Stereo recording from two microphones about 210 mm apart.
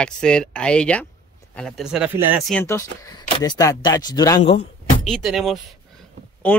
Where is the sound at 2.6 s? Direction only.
15° left (ahead or behind).